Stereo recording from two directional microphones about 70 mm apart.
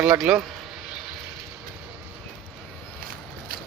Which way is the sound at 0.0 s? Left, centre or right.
Centre.